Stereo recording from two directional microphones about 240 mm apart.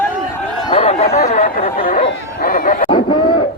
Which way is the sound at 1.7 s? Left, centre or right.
Left.